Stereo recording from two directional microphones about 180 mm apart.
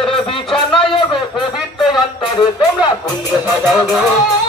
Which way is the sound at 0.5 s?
25° left (ahead or behind).